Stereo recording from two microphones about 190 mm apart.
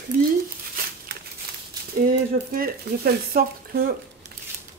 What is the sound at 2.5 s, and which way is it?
Speech, 50° right (ahead or behind).